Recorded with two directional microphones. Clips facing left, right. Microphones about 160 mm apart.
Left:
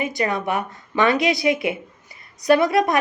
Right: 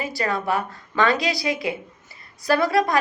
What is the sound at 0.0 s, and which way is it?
A woman's voice, 20° left (ahead or behind).